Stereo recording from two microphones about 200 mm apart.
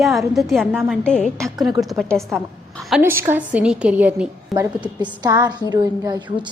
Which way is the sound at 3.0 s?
10° right (ahead or behind).